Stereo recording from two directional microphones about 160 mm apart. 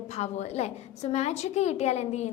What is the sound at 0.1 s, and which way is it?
A woman's voice, 45° left (ahead or behind).